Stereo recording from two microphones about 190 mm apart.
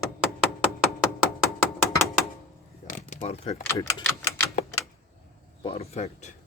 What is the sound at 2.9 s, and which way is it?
Speech, 40° left (ahead or behind).